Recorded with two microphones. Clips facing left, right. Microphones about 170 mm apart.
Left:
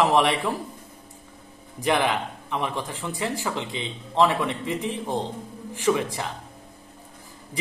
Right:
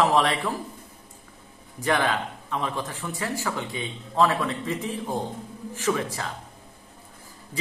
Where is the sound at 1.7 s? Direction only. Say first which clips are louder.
Left 1 dB; 15° left (ahead or behind).